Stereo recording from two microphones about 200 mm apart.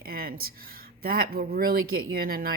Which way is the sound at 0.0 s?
50° right (ahead or behind).